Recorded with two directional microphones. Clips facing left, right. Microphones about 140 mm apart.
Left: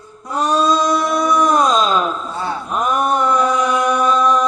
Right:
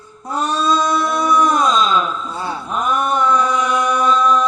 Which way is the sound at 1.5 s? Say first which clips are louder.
Left 1 dB; 40° left (ahead or behind).